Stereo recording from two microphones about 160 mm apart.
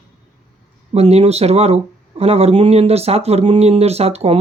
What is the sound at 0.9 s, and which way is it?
Speech, 40° right (ahead or behind).